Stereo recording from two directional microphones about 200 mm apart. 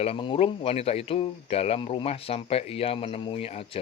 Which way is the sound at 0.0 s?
30° left (ahead or behind).